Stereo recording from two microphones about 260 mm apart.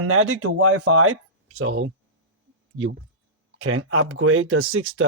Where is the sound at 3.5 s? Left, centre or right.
Right.